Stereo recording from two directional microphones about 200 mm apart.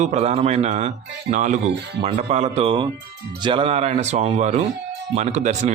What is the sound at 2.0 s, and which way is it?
Speech, 30° right (ahead or behind).